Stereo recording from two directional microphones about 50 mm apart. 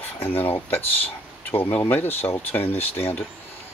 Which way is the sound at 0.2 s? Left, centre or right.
Left.